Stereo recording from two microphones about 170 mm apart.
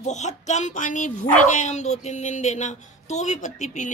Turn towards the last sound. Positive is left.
turn(degrees=45)  # may be behind; listen again after turning